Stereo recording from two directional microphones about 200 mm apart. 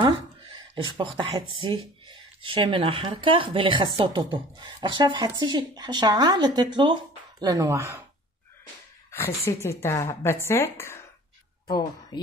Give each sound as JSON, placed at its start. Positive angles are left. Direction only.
{"t": 0.0, "sound": "a sound", "side_deg": -25}
{"t": 2.4, "sound": "a woman's voice", "side_deg": -25}
{"t": 9.5, "sound": "speech", "side_deg": 15}